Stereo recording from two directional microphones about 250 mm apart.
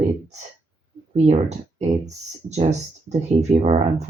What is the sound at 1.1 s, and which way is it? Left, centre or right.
Speech, right.